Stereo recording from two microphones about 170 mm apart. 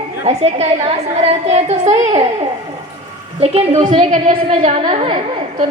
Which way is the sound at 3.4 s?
40° right (ahead or behind).